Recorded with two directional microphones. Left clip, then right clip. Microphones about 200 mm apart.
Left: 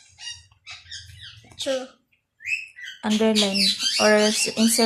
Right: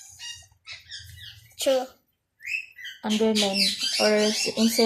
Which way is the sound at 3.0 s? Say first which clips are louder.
Left 2 dB; 25° left (ahead or behind).